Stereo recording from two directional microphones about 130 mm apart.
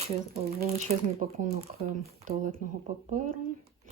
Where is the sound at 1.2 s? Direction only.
90° right.